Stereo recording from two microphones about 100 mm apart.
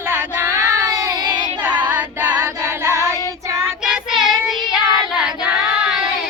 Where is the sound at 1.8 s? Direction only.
15° right (ahead or behind).